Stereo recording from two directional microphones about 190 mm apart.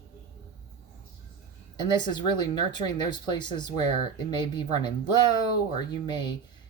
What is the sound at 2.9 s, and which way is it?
Speech, 25° left (ahead or behind).